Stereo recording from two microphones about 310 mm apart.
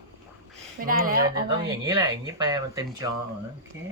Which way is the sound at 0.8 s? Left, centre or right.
Right.